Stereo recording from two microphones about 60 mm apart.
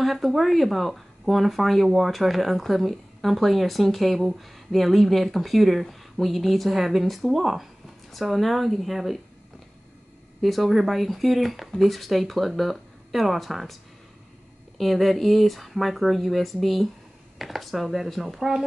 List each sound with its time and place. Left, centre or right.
0.0 s speech: centre
10.4 s speech: centre
14.8 s speech: centre